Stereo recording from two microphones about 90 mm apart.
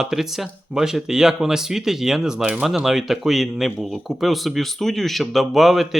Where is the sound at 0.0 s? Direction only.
5° right (ahead or behind).